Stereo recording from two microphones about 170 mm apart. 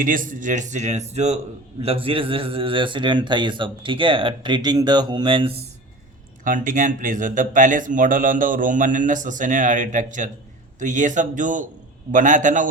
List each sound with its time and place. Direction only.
0.0 s a man's voice: 55° right (ahead or behind); by 5.6 s 30° right (ahead or behind)
6.4 s speech: 50° right (ahead or behind)